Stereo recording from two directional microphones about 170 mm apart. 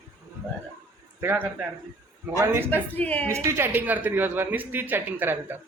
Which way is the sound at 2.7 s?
10° left (ahead or behind).